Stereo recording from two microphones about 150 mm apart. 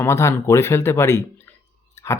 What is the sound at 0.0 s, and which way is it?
Speech, 20° left (ahead or behind).